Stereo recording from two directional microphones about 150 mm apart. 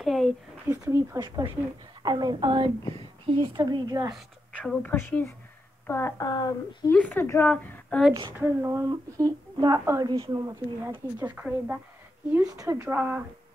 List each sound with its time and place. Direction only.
0.0 s a sound: centre (ahead or behind)
0.7 s a woman's voice: 20° right (ahead or behind)
4.6 s a woman's voice: 10° left (ahead or behind); by 6.9 s 25° left (ahead or behind)
6.9 s speech: 10° left (ahead or behind)
8.4 s a woman's voice: 15° right (ahead or behind)
11.3 s speech: 10° right (ahead or behind)
12.4 s a woman's voice: 20° right (ahead or behind)